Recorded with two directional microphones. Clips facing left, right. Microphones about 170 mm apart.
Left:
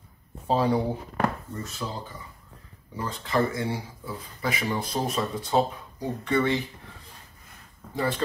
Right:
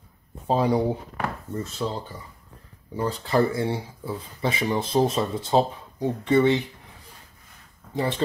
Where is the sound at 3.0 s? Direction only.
35° right (ahead or behind).